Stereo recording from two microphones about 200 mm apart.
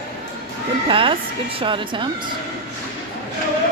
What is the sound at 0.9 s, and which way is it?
Speech, 25° right (ahead or behind).